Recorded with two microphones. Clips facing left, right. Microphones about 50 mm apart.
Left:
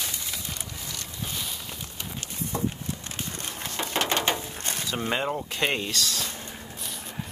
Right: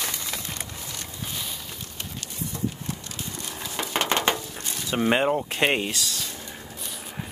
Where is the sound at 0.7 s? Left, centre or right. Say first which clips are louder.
Right 1 dB; right.